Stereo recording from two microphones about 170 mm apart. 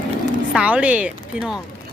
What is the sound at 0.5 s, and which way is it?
Speech, 10° right (ahead or behind).